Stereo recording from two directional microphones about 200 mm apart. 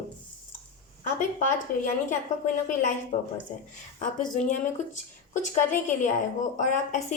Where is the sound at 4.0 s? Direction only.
40° left (ahead or behind).